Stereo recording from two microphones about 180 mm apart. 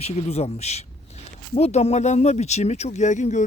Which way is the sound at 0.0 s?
35° left (ahead or behind).